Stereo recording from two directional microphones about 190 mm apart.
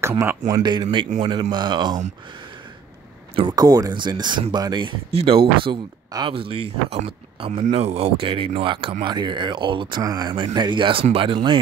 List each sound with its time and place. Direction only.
0.5 s speech: 20° right (ahead or behind)
3.3 s speech: 20° right (ahead or behind)